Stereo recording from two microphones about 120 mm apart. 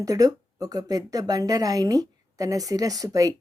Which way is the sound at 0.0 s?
30° right (ahead or behind).